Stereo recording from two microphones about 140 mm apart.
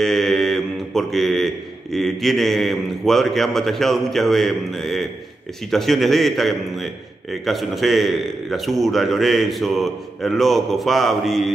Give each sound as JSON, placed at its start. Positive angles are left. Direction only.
{"t": 0.0, "sound": "a man's voice", "side_deg": 0}